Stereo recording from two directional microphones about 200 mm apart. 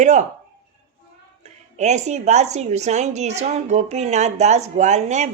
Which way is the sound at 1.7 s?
35° right (ahead or behind).